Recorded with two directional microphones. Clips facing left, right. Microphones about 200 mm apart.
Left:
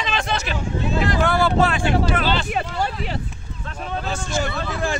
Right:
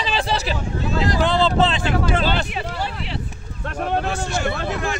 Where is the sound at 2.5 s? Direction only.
50° left (ahead or behind).